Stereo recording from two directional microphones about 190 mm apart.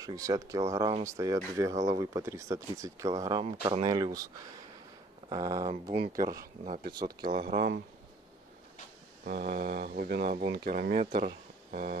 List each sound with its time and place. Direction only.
0.0 s speech: 20° right (ahead or behind)
5.3 s speech: 20° right (ahead or behind)
5.7 s speech: 30° right (ahead or behind)
7.2 s speech: 50° right (ahead or behind)
9.2 s speech: 55° right (ahead or behind)